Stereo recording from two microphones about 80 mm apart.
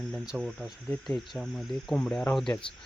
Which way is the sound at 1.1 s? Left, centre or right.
Centre.